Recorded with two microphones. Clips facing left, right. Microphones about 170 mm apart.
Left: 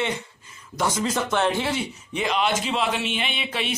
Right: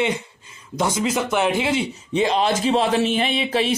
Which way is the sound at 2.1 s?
30° right (ahead or behind).